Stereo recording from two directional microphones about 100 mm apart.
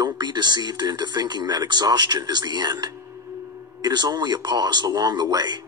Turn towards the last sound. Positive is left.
turn(degrees=-45)  # may be behind; listen again after turning